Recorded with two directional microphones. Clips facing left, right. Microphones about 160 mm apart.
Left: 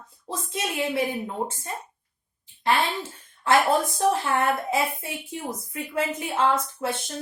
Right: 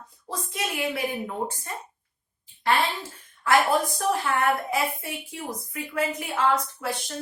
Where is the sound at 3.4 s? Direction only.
25° left (ahead or behind).